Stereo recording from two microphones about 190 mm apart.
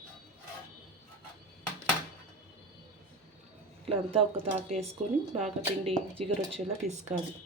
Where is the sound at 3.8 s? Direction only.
30° right (ahead or behind).